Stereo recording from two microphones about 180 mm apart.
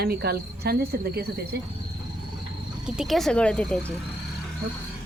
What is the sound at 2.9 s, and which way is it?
Speech, centre (ahead or behind).